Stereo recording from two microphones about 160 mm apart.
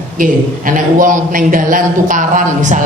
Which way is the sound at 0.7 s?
55° right (ahead or behind).